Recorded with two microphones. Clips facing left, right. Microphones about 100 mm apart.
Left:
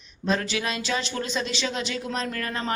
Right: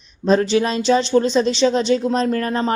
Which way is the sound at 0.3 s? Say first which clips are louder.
Right 10 dB; 30° right (ahead or behind).